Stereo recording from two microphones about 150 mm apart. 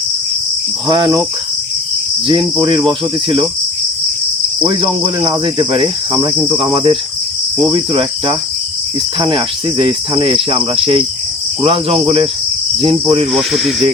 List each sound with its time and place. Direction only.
0.9 s cricket: 30° right (ahead or behind)
2.2 s cricket: 30° right (ahead or behind)
4.6 s cricket: 30° right (ahead or behind)
13.3 s speech: centre (ahead or behind)